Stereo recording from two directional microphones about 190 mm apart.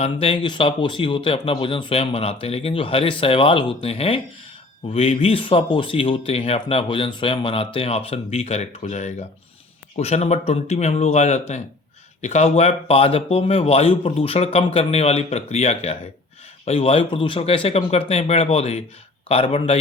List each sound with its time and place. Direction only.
0.0 s speech: 30° left (ahead or behind)